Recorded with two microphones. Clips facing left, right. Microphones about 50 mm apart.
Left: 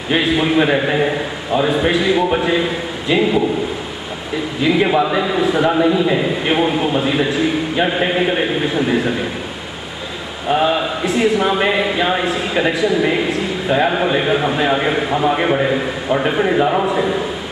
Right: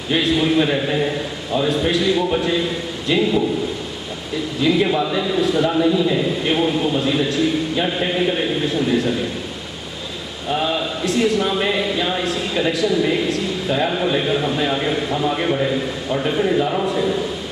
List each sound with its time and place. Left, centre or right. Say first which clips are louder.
0.1 s a man's voice: left 2 dB; left
4.6 s a man's voice: left 3 dB; left
10.5 s a man's voice: left 5 dB; left